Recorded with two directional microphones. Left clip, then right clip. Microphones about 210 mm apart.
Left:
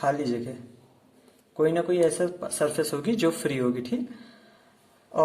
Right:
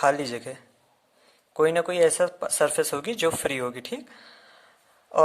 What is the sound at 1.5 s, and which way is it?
Speech, 40° right (ahead or behind).